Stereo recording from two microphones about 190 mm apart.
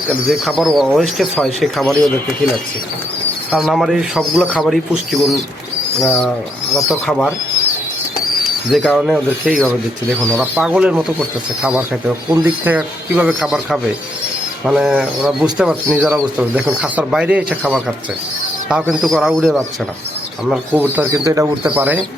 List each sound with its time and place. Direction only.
0.1 s speech: centre (ahead or behind)
3.5 s speech: centre (ahead or behind)
6.1 s speech: 10° left (ahead or behind)
6.8 s speech: centre (ahead or behind)
8.7 s speech: centre (ahead or behind)
10.3 s speech: 10° right (ahead or behind)
20.9 s speech: 15° right (ahead or behind)